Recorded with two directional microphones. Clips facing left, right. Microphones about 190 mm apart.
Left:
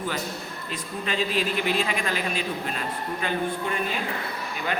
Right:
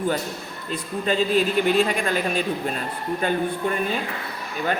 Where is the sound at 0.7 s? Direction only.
40° right (ahead or behind).